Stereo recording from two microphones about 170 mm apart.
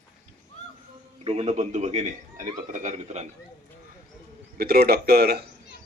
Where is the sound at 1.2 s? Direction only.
40° right (ahead or behind).